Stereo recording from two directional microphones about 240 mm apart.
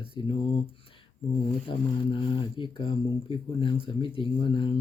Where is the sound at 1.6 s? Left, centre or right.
Left.